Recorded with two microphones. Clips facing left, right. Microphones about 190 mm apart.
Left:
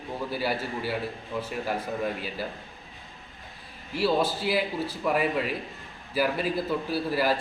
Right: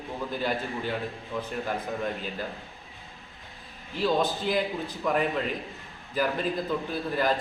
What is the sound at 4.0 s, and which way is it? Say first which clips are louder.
A man's voice: left 1 dB; 5° left (ahead or behind).